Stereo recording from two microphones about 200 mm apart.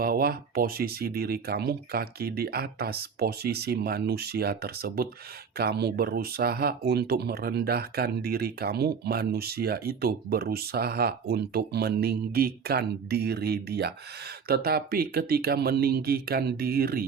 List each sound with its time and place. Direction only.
0.0 s speech: 50° right (ahead or behind)